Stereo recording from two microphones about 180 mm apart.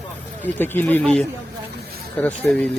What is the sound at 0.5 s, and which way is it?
Speech, 10° left (ahead or behind).